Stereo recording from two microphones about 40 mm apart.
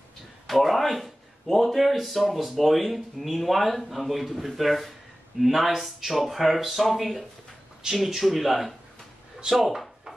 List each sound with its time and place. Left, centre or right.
0.5 s speech: centre
7.8 s speech: centre
8.2 s speech: centre